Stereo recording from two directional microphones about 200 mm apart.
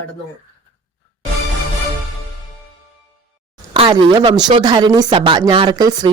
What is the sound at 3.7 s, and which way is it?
A woman's voice, 25° right (ahead or behind).